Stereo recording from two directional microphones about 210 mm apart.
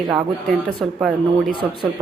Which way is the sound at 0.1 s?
Centre (ahead or behind).